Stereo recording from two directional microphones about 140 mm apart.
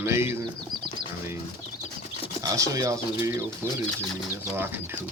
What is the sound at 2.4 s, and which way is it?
Speech, 25° right (ahead or behind).